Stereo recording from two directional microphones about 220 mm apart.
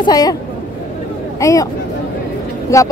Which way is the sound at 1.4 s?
15° left (ahead or behind).